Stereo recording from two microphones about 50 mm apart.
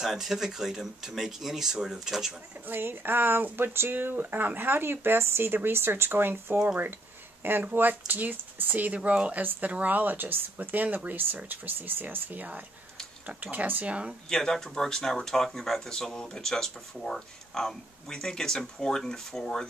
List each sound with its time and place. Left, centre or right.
0.0 s speech: centre
2.6 s speech: right
3.9 s speech: right
9.4 s speech: right
13.8 s speech: right
14.3 s speech: centre